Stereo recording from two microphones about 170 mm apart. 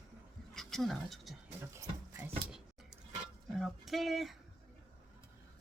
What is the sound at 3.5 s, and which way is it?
Speech, centre (ahead or behind).